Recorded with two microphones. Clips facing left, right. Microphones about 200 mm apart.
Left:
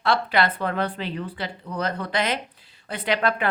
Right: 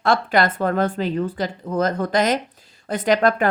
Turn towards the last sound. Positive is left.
turn(degrees=-45)  # may be behind; listen again after turning